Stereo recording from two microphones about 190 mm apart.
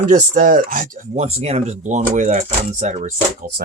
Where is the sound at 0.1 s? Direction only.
45° right (ahead or behind).